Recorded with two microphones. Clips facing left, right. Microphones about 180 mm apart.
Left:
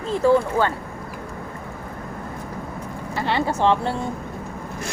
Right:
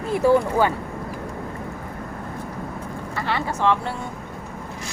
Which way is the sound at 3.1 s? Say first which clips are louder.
Left 4 dB; 30° left (ahead or behind).